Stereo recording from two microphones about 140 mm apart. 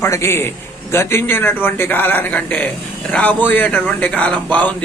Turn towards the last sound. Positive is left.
turn(degrees=10)  # may be behind; listen again after turning